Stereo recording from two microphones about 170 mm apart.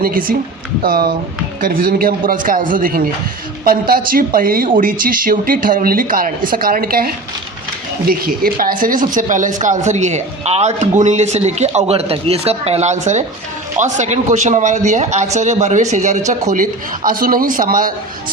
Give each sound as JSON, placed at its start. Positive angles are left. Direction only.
{"t": 0.0, "sound": "speech", "side_deg": -55}
{"t": 8.2, "sound": "speech", "side_deg": -55}